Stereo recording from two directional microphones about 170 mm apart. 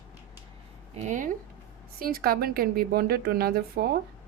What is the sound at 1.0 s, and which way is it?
Speech, 50° right (ahead or behind).